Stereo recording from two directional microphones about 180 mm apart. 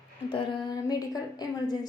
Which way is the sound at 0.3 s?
25° left (ahead or behind).